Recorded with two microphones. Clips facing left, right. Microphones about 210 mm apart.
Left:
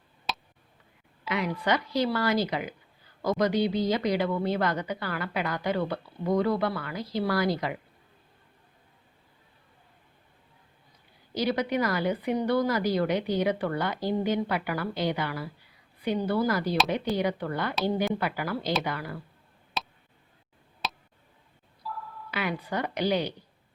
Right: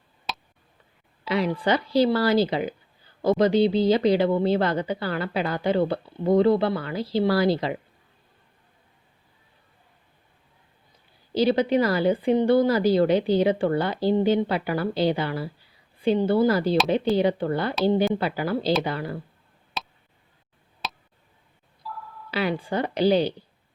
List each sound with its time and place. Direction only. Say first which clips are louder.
0.3 s tick: even; centre (ahead or behind)
1.2 s speech: right 6 dB; 30° right (ahead or behind)
11.3 s speech: right 7 dB; 30° right (ahead or behind)
19.8 s tick: even; centre (ahead or behind)
20.8 s a sound: even; centre (ahead or behind)
22.3 s speech: right 6 dB; 30° right (ahead or behind)